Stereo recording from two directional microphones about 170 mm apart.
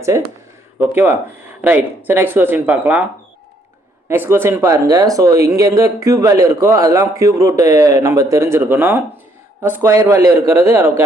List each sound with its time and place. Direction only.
0.1 s speech: 20° right (ahead or behind)
4.1 s speech: 15° right (ahead or behind)